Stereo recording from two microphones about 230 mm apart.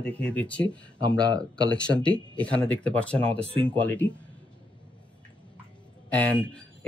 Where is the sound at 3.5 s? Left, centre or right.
Right.